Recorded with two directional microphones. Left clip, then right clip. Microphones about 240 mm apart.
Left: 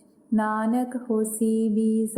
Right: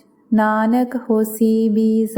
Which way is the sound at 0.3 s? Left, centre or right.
Right.